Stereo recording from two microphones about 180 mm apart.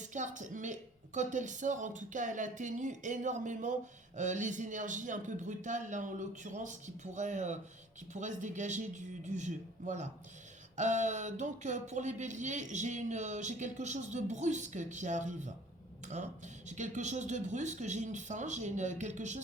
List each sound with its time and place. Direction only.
0.0 s a woman's voice: 40° right (ahead or behind)
16.6 s speech: 40° right (ahead or behind)